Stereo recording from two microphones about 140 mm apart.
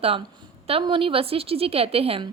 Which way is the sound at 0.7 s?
40° right (ahead or behind).